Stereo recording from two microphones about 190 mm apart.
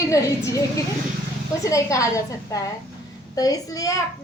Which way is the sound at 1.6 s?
15° left (ahead or behind).